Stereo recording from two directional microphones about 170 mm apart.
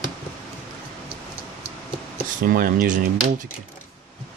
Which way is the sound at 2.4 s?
55° right (ahead or behind).